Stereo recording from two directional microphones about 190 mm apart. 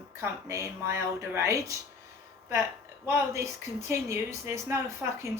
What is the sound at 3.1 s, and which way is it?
A woman's voice, 15° right (ahead or behind).